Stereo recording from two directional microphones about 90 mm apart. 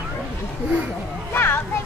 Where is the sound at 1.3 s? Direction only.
25° left (ahead or behind).